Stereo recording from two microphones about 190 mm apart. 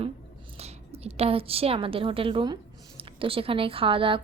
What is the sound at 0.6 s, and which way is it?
A woman's voice, 30° right (ahead or behind).